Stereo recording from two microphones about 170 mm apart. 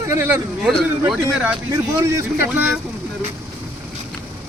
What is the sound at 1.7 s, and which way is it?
Speech, 20° right (ahead or behind).